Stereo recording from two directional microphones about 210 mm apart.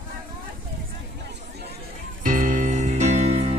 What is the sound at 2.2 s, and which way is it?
Music, 40° right (ahead or behind).